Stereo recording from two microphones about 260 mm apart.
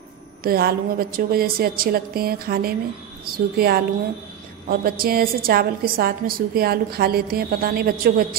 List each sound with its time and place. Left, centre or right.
0.4 s a woman's voice: right